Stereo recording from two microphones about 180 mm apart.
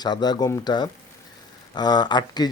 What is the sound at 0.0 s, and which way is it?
Speech, 20° left (ahead or behind).